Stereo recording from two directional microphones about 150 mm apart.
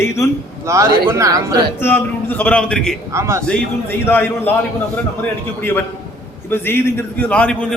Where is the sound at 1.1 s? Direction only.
20° right (ahead or behind).